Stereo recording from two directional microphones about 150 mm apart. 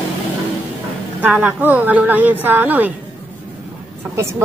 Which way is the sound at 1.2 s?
10° right (ahead or behind).